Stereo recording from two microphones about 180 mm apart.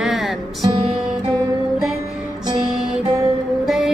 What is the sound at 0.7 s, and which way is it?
Music, 30° right (ahead or behind).